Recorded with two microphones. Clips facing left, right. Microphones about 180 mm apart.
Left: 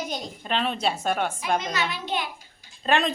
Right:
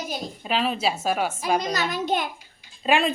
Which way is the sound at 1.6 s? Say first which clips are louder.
Right 3 dB; 40° right (ahead or behind).